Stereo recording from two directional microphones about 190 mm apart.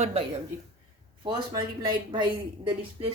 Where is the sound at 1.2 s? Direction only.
25° right (ahead or behind).